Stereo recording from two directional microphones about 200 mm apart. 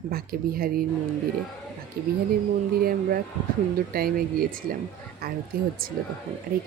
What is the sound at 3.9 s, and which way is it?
Speech, 45° right (ahead or behind).